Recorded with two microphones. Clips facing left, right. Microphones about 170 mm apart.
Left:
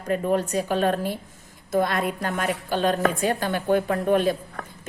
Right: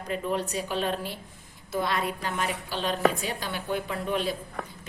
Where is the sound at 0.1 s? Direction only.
45° left (ahead or behind).